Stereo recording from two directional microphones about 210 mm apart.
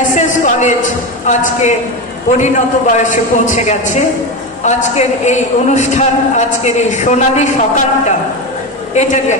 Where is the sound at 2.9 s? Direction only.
35° left (ahead or behind).